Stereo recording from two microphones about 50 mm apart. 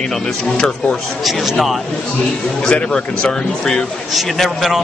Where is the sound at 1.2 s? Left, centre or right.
Centre.